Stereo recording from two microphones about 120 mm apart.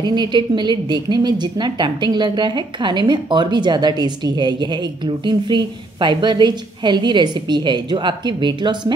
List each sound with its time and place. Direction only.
0.0 s a woman's voice: 40° right (ahead or behind)